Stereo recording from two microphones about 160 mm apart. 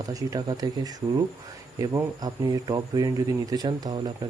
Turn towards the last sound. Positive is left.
turn(degrees=-25)  # may be behind; listen again after turning